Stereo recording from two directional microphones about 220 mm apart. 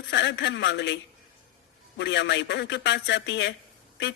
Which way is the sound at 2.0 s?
50° left (ahead or behind).